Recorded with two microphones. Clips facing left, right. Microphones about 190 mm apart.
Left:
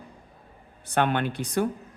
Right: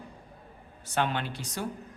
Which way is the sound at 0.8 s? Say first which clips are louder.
Left 5 dB; 55° left (ahead or behind).